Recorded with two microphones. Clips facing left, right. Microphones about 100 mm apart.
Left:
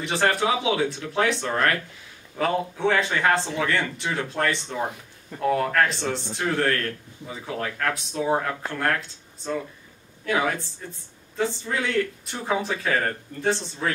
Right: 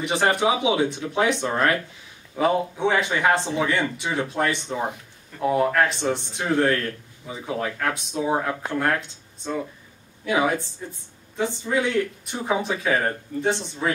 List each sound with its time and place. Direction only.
0.0 s speech: 20° right (ahead or behind)
10.2 s speech: 15° right (ahead or behind)